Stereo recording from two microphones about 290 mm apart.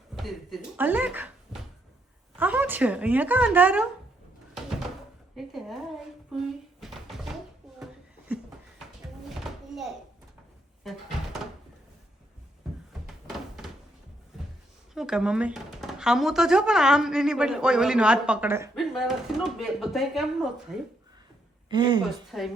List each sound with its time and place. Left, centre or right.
0.2 s speech: centre
1.5 s cupboard open or close: centre
2.4 s speech: centre
5.4 s speech: centre
6.3 s a sound: centre
9.4 s a sound: centre
10.8 s speech: centre
14.9 s speech: centre
21.7 s speech: centre
22.3 s speech: centre